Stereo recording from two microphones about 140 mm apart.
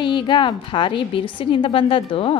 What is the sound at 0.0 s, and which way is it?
Speech, 35° left (ahead or behind).